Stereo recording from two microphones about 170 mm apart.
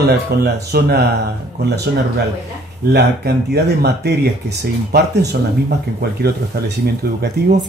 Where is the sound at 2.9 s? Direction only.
75° right (ahead or behind).